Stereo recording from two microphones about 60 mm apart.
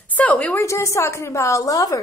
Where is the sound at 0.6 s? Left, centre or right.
Left.